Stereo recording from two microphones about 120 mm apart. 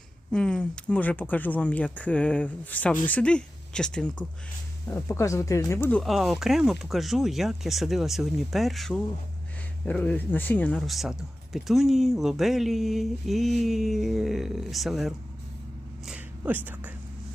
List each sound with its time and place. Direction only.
0.3 s speech: 5° left (ahead or behind)
4.9 s speech: 20° left (ahead or behind)
6.0 s speech: centre (ahead or behind)
9.8 s speech: 10° left (ahead or behind)
10.8 s speech: centre (ahead or behind)
16.0 s a sound: 10° right (ahead or behind)